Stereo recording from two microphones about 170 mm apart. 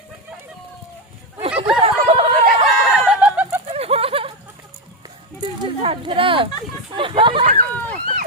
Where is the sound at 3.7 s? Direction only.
35° right (ahead or behind).